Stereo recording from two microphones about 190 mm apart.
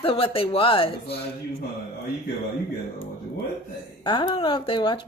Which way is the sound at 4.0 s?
25° left (ahead or behind).